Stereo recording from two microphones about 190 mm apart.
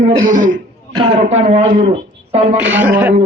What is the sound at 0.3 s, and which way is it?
A man's voice, 45° right (ahead or behind).